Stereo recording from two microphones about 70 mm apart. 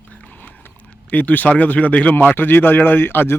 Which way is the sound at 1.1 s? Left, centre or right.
Left.